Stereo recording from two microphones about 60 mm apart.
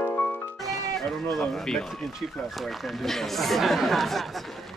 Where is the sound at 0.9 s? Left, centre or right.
Centre.